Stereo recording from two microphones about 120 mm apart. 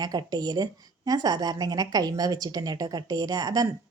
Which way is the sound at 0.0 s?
35° right (ahead or behind).